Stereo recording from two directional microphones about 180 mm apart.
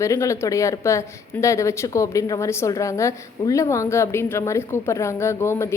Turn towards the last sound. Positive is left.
turn(degrees=15)  # may be behind; listen again after turning